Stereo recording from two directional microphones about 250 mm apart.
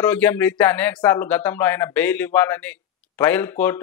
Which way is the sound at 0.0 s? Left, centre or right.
Centre.